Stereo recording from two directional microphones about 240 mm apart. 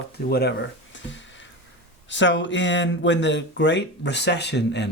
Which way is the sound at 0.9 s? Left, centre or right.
Left.